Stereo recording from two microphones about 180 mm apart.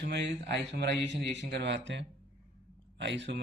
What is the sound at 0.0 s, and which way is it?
A man's voice, 75° right (ahead or behind).